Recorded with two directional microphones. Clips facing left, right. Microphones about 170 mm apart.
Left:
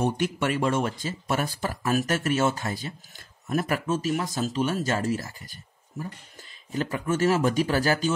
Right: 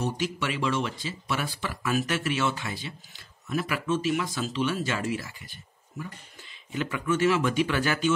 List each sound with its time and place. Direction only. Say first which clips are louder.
0.0 s speech: left 4 dB; 50° left (ahead or behind)